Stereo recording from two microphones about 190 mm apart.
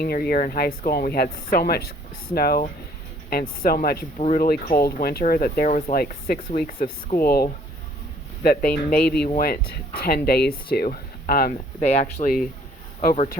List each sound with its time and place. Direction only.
0.0 s speech: 55° left (ahead or behind)
5.6 s speech: 40° left (ahead or behind)
6.0 s speech: 55° left (ahead or behind)
12.2 s speech: 35° left (ahead or behind)
13.0 s speech: 50° left (ahead or behind)